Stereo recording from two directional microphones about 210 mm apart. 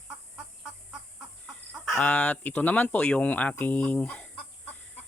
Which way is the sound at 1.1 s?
Centre (ahead or behind).